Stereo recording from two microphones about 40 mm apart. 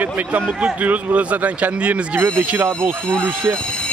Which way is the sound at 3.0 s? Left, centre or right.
Left.